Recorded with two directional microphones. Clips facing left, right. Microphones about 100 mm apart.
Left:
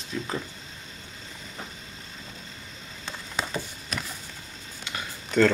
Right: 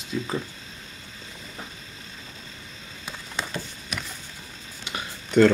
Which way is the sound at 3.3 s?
Centre (ahead or behind).